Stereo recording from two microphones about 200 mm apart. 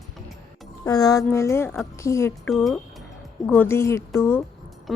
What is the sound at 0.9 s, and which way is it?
Speech, 15° left (ahead or behind).